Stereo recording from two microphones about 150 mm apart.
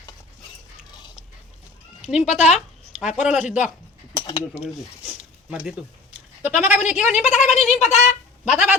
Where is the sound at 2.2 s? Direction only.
50° left (ahead or behind).